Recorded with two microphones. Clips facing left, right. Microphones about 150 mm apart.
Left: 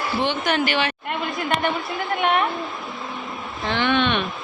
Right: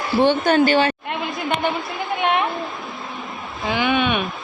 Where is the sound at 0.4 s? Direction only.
30° right (ahead or behind).